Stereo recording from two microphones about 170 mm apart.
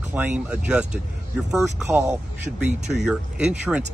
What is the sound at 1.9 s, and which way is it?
Speech, 15° right (ahead or behind).